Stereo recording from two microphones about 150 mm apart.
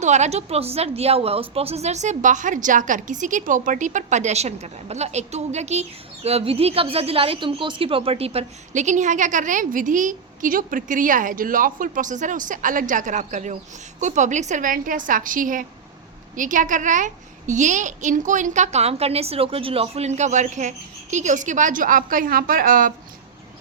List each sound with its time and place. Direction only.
0.0 s a woman's voice: 50° right (ahead or behind); by 22.9 s 70° right (ahead or behind)